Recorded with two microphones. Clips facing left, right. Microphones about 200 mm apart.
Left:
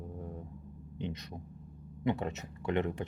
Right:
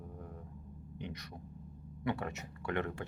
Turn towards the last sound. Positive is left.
turn(degrees=20)  # may be behind; listen again after turning